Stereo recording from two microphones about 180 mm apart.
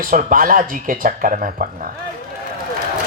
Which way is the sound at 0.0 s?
50° right (ahead or behind).